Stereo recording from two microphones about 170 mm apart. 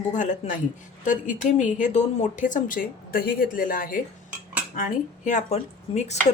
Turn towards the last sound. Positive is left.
turn(degrees=40)  # may be behind; listen again after turning